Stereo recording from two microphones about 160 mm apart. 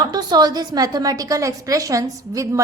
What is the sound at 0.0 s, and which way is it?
A woman's voice, 25° right (ahead or behind).